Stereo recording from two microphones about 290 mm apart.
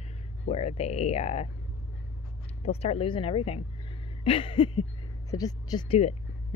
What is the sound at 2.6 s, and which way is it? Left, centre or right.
Speech, left.